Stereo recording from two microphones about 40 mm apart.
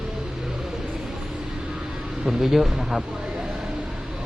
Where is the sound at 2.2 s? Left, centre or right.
Centre.